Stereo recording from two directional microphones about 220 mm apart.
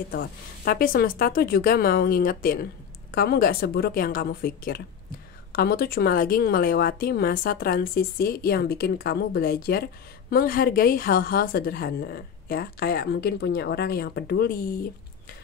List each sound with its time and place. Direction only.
0.1 s speech: 40° left (ahead or behind)